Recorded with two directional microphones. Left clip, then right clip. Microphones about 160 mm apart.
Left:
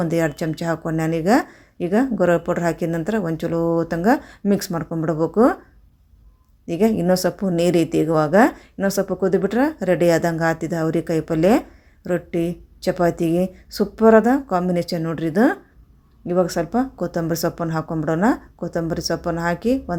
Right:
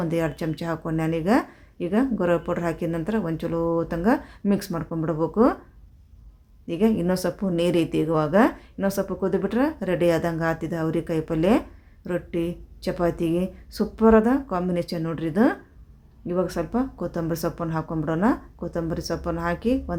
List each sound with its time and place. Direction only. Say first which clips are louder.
0.0 s a woman's voice: left 5 dB; 25° left (ahead or behind)
6.7 s a woman's voice: left 5 dB; 25° left (ahead or behind)